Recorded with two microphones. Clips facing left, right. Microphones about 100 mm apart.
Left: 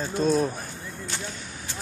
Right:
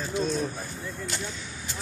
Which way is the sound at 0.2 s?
40° left (ahead or behind).